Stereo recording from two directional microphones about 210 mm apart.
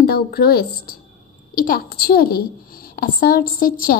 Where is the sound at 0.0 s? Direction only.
45° left (ahead or behind).